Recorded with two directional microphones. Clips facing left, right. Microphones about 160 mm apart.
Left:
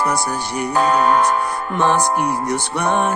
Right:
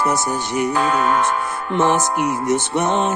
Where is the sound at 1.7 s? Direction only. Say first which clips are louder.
Even; 20° right (ahead or behind).